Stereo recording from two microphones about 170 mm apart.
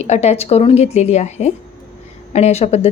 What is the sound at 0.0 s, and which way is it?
Speech, 40° left (ahead or behind).